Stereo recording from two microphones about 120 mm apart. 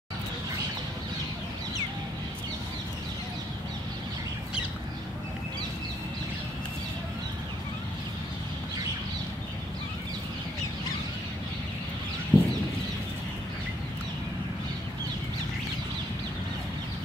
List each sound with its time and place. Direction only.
12.3 s chicken: 15° right (ahead or behind)